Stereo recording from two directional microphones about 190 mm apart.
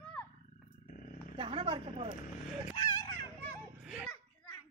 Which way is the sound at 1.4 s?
30° right (ahead or behind).